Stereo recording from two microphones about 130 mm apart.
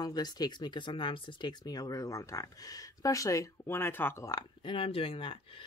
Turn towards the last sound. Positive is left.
turn(degrees=45)  # may be behind; listen again after turning